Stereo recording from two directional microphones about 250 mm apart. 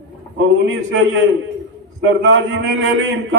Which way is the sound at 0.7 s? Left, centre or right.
Right.